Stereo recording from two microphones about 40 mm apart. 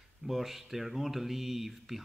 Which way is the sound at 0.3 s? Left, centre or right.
Centre.